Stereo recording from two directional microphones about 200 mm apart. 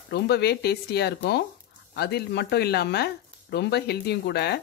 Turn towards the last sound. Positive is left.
turn(degrees=55)  # may be behind; listen again after turning